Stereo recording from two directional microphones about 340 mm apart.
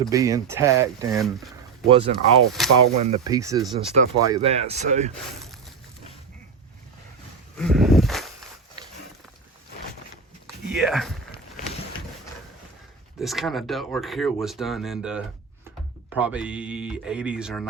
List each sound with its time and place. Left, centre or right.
0.0 s speech: centre
1.9 s speech: centre
2.6 s speech: centre
2.9 s speech: centre
7.6 s a sound: centre
10.8 s speech: centre
13.1 s speech: centre